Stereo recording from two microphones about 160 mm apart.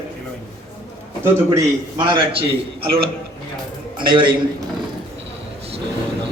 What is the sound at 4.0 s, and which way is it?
Speech, 30° right (ahead or behind).